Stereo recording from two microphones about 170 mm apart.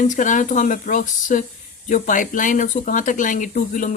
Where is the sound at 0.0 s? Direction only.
50° left (ahead or behind).